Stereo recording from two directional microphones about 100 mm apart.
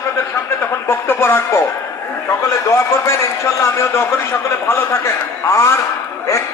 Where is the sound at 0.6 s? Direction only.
25° left (ahead or behind).